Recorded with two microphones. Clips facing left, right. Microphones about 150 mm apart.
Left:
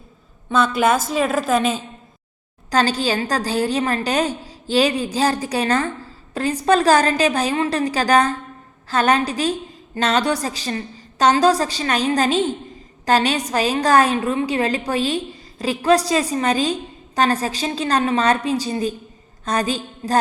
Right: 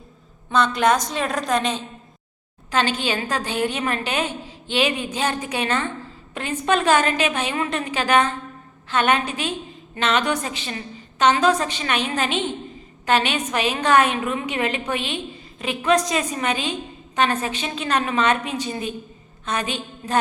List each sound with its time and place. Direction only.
0.5 s a woman's voice: 5° left (ahead or behind)
2.6 s a woman's voice: 35° left (ahead or behind)